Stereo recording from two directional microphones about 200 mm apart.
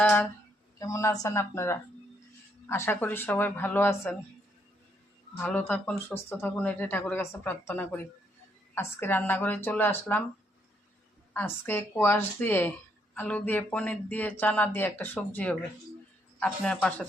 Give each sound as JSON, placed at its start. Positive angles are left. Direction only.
{"t": 0.0, "sound": "a sound", "side_deg": 10}
{"t": 0.8, "sound": "speech", "side_deg": 15}
{"t": 5.4, "sound": "speech", "side_deg": 10}
{"t": 11.3, "sound": "a man's voice", "side_deg": 10}